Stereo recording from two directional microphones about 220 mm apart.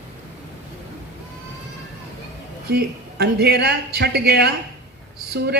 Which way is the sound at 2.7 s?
45° right (ahead or behind).